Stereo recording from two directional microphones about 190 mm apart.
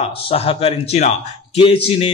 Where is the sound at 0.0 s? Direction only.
30° left (ahead or behind).